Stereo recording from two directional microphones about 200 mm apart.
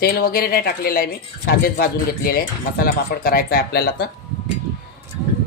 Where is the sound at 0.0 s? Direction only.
50° left (ahead or behind).